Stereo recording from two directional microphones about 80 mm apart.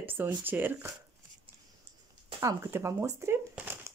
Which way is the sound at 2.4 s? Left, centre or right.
Right.